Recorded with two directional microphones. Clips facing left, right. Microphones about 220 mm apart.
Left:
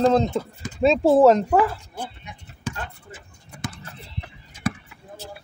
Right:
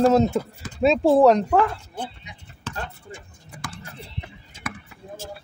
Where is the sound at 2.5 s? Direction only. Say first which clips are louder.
Left 1 dB; 5° left (ahead or behind).